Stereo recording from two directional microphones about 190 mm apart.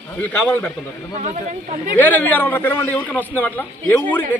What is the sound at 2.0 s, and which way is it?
A man's voice, 10° left (ahead or behind).